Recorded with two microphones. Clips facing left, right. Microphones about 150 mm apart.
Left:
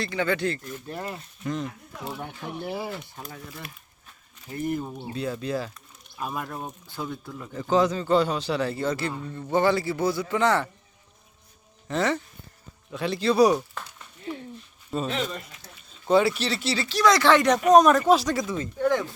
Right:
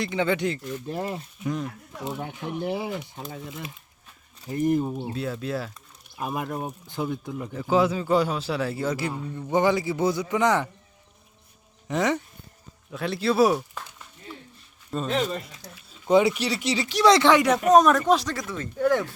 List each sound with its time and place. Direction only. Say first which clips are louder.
0.0 s a man's voice: right 1 dB; 20° right (ahead or behind)
2.6 s speech: right 3 dB; centre (ahead or behind)
3.2 s a man's voice: right 4 dB; 20° right (ahead or behind)
5.0 s a man's voice: even; centre (ahead or behind); by 7.5 s 15° right (ahead or behind)
7.5 s a man's voice: even; 5° right (ahead or behind)
11.9 s a man's voice: right 1 dB; 15° right (ahead or behind)
12.9 s speech: left 1 dB; centre (ahead or behind)
14.8 s a sound: left 1 dB; 5° left (ahead or behind)
15.1 s speech: right 4 dB; 30° right (ahead or behind)
15.9 s speech: right 1 dB; 15° right (ahead or behind)
17.0 s speech: right 3 dB; 25° right (ahead or behind)
17.2 s a man's voice: even; 10° right (ahead or behind)
18.3 s speech: left 4 dB; 20° left (ahead or behind)
18.8 s speech: right 2 dB; 5° right (ahead or behind)